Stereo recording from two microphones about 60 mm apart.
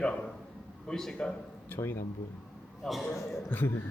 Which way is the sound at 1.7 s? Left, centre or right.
Left.